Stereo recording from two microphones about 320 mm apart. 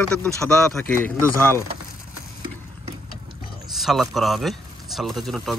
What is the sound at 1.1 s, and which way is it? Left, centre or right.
Speech, centre.